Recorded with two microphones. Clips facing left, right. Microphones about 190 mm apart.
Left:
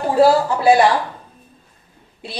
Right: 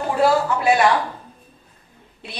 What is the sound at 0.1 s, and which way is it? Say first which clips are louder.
Speech: left 4 dB; 30° left (ahead or behind).